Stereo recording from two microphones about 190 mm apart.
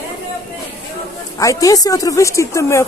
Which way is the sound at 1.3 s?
15° left (ahead or behind).